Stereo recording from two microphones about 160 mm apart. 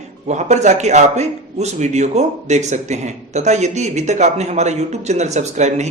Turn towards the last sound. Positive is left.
turn(degrees=-45)  # may be behind; listen again after turning